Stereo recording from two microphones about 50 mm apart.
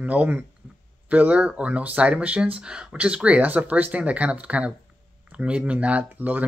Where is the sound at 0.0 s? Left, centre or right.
Right.